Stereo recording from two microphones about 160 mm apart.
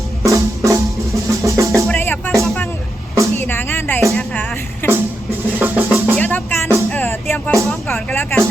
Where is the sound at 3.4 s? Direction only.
15° left (ahead or behind).